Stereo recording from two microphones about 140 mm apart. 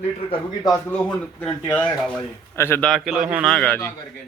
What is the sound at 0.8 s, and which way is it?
Speech, 10° left (ahead or behind).